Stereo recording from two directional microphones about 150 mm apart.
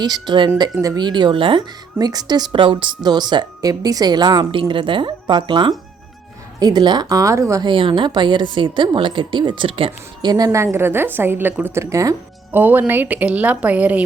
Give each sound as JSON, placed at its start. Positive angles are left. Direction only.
{"t": 0.0, "sound": "a woman's voice", "side_deg": -30}
{"t": 7.7, "sound": "a woman's voice", "side_deg": -35}